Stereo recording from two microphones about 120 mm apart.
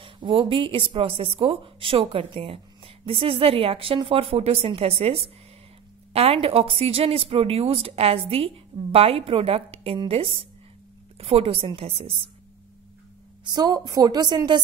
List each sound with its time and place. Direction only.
0.0 s a woman's voice: 45° right (ahead or behind)
13.4 s a woman's voice: 35° right (ahead or behind)